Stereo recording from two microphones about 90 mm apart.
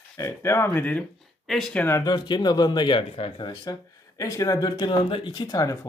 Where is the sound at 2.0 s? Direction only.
55° left (ahead or behind); by 3.4 s 90° left.